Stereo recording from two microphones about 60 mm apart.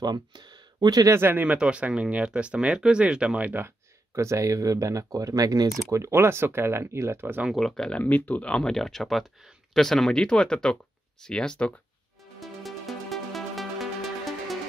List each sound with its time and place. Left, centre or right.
1.1 s speech: right
1.4 s speech: right
3.6 s speech: right
5.9 s speech: right
7.5 s speech: centre
8.0 s speech: left
8.7 s speech: centre
12.4 s music: centre